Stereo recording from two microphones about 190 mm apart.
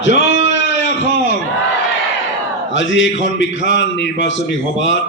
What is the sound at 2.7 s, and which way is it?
A man's voice, 70° left (ahead or behind).